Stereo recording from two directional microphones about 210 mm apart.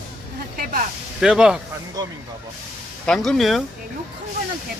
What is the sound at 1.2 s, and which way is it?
Speech, 5° right (ahead or behind).